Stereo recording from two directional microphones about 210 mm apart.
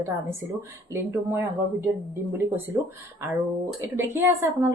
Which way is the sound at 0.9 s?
10° right (ahead or behind).